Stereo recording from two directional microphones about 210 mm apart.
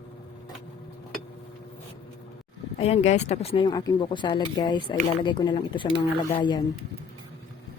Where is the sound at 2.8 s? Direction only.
30° left (ahead or behind).